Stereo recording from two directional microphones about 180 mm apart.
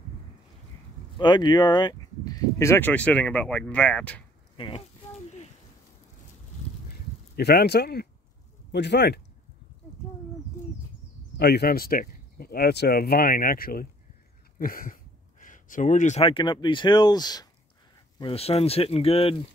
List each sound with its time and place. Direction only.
1.1 s speech: 25° left (ahead or behind); by 4.2 s 5° left (ahead or behind)
4.6 s speech: 30° left (ahead or behind)
7.3 s a man's voice: 60° left (ahead or behind)
11.3 s speech: 65° left (ahead or behind)
14.6 s a sound: 50° left (ahead or behind)
15.4 s speech: 45° left (ahead or behind); by 17.5 s 20° left (ahead or behind)
18.2 s speech: 35° left (ahead or behind)